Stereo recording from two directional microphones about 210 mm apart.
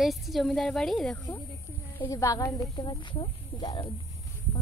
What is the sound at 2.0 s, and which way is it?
Speech, 15° left (ahead or behind).